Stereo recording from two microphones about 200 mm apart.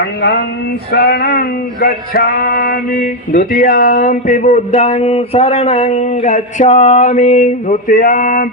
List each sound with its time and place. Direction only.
0.0 s speech: 60° left (ahead or behind)
0.9 s male singing: 50° left (ahead or behind)